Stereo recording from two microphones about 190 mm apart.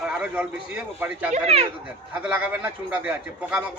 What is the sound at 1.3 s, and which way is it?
Speech, 35° right (ahead or behind).